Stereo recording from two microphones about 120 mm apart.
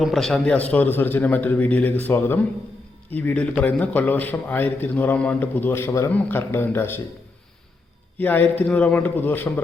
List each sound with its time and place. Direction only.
0.0 s a man's voice: centre (ahead or behind); by 7.0 s 20° left (ahead or behind)
8.2 s a man's voice: 15° left (ahead or behind)